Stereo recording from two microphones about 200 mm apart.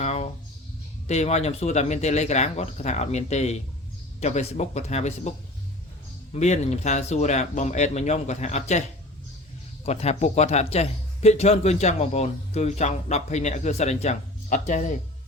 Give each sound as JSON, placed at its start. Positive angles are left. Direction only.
{"t": 0.0, "sound": "a sound", "side_deg": 35}
{"t": 1.0, "sound": "speech", "side_deg": 35}
{"t": 6.3, "sound": "speech", "side_deg": 35}
{"t": 9.8, "sound": "speech", "side_deg": 30}